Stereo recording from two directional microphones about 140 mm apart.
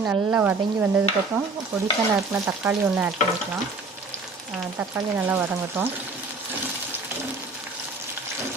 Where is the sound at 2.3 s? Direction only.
15° right (ahead or behind).